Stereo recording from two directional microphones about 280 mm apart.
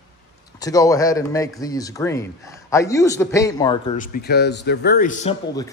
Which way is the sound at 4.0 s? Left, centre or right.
Left.